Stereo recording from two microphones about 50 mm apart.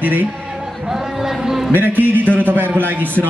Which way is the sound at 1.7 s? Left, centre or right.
Right.